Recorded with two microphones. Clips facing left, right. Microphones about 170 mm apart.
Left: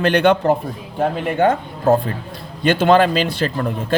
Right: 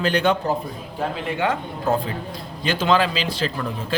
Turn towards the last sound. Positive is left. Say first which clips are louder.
# left 5 dB
turn(degrees=50)  # may be behind; listen again after turning